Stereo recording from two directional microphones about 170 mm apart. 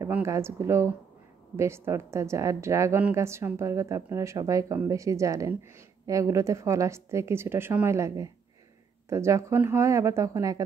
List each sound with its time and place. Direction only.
0.0 s a woman's voice: 15° right (ahead or behind)